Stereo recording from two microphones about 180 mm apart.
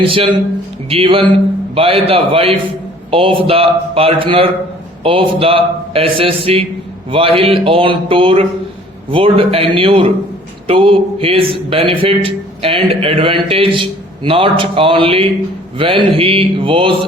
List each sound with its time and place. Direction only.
0.0 s a man's voice: 30° right (ahead or behind)